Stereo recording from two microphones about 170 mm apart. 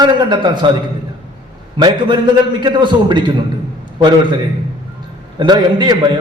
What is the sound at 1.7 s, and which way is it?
A man's voice, 25° right (ahead or behind).